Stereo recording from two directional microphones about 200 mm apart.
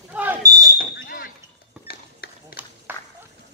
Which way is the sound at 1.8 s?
50° left (ahead or behind).